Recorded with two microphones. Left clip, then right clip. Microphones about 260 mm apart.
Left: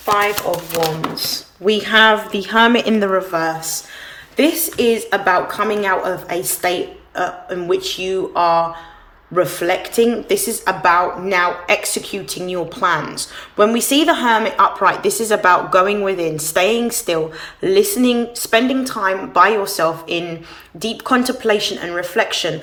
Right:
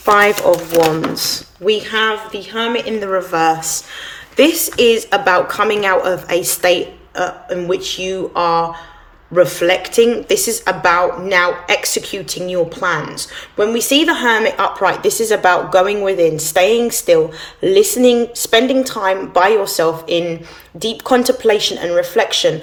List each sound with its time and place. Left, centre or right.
0.0 s speech: centre
1.6 s a woman's voice: centre